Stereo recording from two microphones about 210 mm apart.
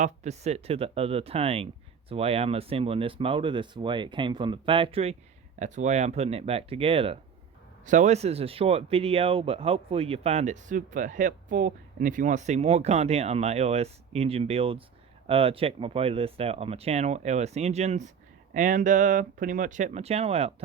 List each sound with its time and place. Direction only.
0.0 s speech: 30° right (ahead or behind)